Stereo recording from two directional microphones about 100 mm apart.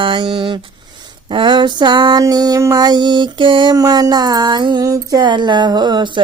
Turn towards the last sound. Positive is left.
turn(degrees=-45)  # may be behind; listen again after turning